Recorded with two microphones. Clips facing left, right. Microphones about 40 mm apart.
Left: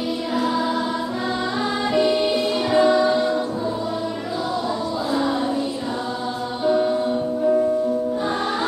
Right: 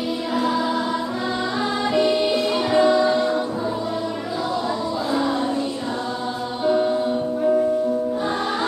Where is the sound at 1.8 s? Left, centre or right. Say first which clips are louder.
Even; centre.